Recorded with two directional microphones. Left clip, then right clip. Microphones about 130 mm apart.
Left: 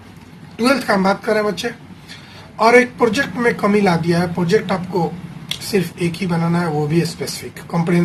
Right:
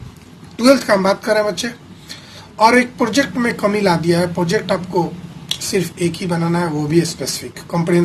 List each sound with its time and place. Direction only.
0.6 s speech: 35° right (ahead or behind)